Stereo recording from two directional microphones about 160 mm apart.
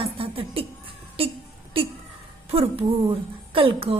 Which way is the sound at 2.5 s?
35° right (ahead or behind).